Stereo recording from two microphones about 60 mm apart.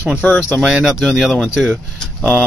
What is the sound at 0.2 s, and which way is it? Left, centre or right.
Speech, left.